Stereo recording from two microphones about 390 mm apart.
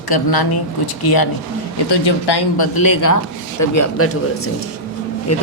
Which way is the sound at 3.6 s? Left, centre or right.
Left.